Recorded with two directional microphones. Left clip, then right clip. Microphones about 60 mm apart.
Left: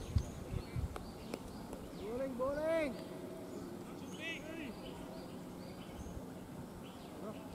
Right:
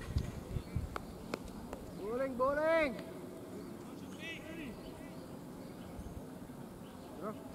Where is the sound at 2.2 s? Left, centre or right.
Right.